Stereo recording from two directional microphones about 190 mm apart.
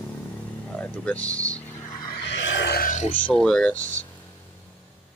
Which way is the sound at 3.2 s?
5° left (ahead or behind).